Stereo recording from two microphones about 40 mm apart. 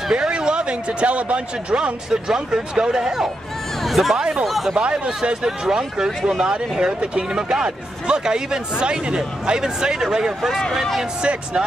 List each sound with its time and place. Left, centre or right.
0.1 s a man's voice: right
2.0 s speech: centre
3.8 s speech: centre
4.2 s speech: right
4.5 s speech: centre
4.7 s speech: right
10.7 s speech: centre